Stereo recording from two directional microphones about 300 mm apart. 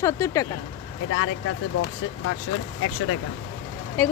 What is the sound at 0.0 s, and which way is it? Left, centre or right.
Speech, centre.